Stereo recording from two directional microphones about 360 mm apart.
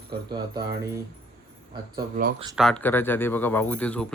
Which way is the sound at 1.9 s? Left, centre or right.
Right.